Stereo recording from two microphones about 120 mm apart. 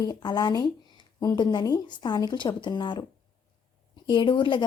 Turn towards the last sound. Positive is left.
turn(degrees=45)  # may be behind; listen again after turning